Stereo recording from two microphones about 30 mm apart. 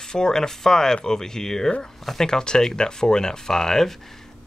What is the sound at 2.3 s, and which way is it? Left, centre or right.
Speech, left.